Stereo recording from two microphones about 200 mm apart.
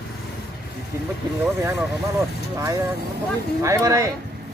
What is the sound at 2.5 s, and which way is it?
Speech, 15° right (ahead or behind).